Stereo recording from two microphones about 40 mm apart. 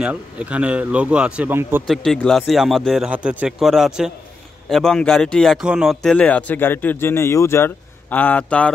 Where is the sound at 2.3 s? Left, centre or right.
Centre.